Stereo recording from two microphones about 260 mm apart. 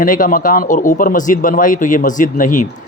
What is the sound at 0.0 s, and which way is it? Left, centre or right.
Speech, left.